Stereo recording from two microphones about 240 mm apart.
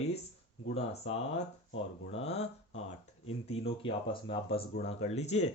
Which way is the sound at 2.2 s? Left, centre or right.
Left.